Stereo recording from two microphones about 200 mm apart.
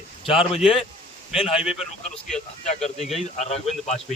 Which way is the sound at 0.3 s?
25° left (ahead or behind).